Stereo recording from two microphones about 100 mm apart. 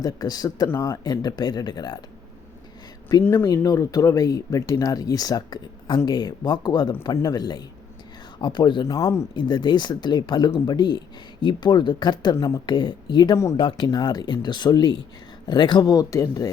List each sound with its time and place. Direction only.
0.0 s speech: 40° left (ahead or behind)
0.7 s speech: 30° left (ahead or behind)
1.0 s speech: 45° left (ahead or behind)
3.2 s speech: 20° left (ahead or behind)
3.5 s speech: 35° left (ahead or behind)
9.3 s speech: 50° left (ahead or behind)
13.3 s speech: 30° left (ahead or behind)
13.6 s speech: 50° left (ahead or behind); by 16.5 s 35° left (ahead or behind)